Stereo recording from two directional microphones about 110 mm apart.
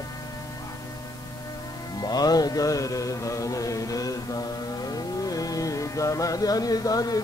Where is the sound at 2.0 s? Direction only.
35° left (ahead or behind).